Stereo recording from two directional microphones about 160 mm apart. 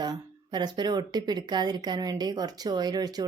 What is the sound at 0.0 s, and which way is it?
A woman's voice, 25° right (ahead or behind).